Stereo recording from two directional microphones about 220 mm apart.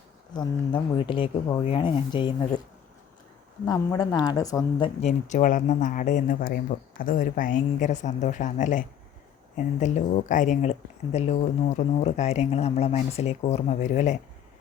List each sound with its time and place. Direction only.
0.3 s speech: 20° left (ahead or behind)
3.7 s a woman's voice: 15° left (ahead or behind)
5.0 s speech: 35° left (ahead or behind)